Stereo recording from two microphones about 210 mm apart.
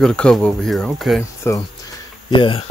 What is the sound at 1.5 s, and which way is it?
Speech, 15° left (ahead or behind).